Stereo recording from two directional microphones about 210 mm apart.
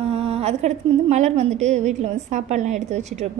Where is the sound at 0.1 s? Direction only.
30° right (ahead or behind).